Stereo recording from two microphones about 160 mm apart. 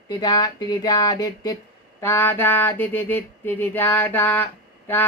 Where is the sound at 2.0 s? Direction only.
15° left (ahead or behind).